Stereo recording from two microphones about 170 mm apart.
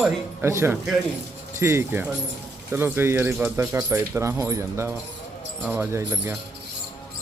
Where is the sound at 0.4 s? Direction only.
15° right (ahead or behind).